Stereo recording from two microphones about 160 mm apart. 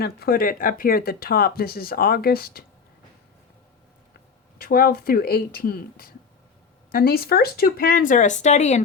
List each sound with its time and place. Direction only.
0.0 s speech: 70° left (ahead or behind)
4.5 s speech: 65° left (ahead or behind); by 8.8 s 45° left (ahead or behind)